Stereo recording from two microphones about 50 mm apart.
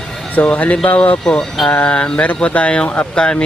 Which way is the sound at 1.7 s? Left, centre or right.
Left.